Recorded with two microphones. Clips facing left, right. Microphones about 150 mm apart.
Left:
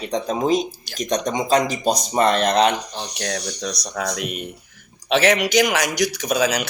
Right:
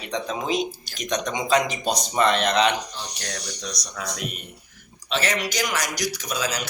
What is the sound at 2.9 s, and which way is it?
Speech, 55° left (ahead or behind).